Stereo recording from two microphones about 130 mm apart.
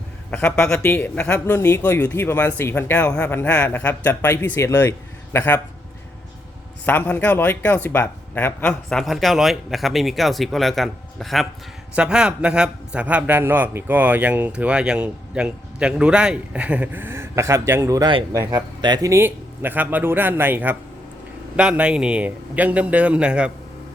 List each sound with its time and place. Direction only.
0.3 s speech: 10° left (ahead or behind)
6.8 s a man's voice: 15° left (ahead or behind); by 19.1 s 30° right (ahead or behind)
19.1 s a man's voice: 15° right (ahead or behind)